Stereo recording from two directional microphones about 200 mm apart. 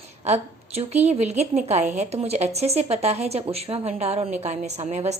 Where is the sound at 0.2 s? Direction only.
35° right (ahead or behind).